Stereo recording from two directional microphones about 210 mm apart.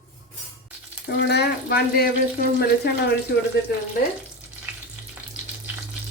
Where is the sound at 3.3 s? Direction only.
50° left (ahead or behind).